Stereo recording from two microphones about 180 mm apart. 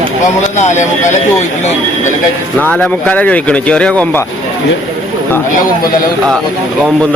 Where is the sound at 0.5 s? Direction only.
40° left (ahead or behind).